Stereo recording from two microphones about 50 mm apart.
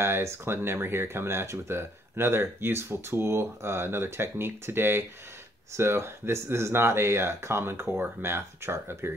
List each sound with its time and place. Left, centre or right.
0.0 s speech: right